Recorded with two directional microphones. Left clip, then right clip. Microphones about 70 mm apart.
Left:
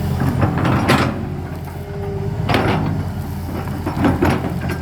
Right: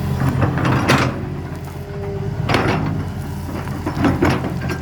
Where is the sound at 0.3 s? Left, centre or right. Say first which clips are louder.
Even; right.